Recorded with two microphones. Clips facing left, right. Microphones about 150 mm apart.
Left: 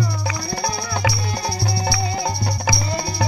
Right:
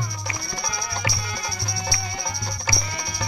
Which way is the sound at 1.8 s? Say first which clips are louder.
Left 7 dB; 65° left (ahead or behind).